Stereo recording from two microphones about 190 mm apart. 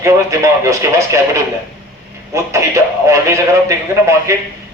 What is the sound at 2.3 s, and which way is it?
A man's voice, 15° right (ahead or behind).